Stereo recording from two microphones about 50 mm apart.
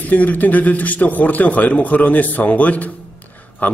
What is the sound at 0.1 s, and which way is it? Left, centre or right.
A man's voice, left.